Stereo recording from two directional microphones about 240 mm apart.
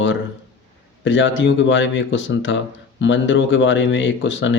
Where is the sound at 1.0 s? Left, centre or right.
Left.